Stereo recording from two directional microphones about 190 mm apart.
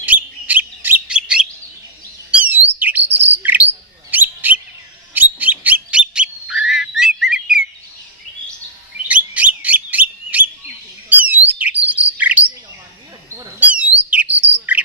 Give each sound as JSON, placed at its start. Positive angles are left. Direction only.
{"t": 0.0, "sound": "bird", "side_deg": -10}
{"t": 9.0, "sound": "bird", "side_deg": -5}